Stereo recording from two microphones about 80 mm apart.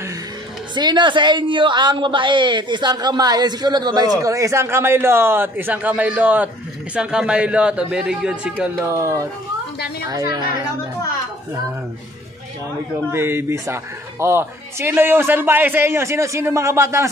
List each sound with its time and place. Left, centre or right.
0.7 s a man's voice: right; by 8.8 s centre
8.8 s a man's voice: right
13.1 s a man's voice: right